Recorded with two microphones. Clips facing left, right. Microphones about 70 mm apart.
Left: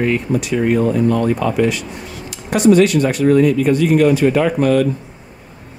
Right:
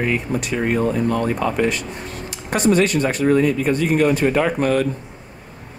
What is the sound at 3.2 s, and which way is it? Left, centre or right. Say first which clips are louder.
Speech: left 4 dB; right.